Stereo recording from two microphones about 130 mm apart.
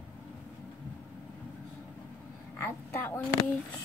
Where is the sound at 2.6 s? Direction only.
15° left (ahead or behind).